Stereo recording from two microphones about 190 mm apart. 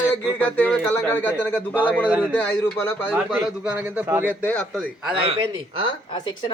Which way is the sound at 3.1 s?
10° right (ahead or behind).